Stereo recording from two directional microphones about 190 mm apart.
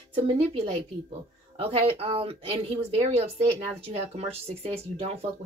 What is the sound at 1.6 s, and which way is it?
Speech, 30° right (ahead or behind).